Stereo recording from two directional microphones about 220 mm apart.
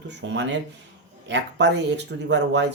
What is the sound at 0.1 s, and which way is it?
Speech, 55° right (ahead or behind).